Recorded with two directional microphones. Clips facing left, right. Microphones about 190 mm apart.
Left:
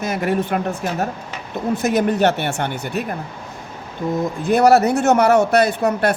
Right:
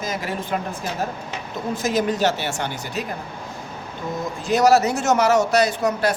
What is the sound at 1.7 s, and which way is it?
Speech, 60° left (ahead or behind).